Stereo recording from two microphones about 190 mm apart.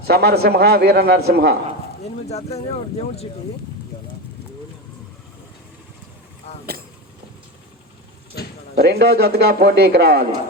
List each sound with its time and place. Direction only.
0.1 s speech: 60° right (ahead or behind)
2.3 s speech: 35° left (ahead or behind)
8.4 s a sound: 60° left (ahead or behind)
8.7 s speech: 60° right (ahead or behind)